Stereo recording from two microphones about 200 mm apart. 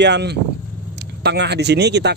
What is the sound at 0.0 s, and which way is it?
Speech, 60° right (ahead or behind).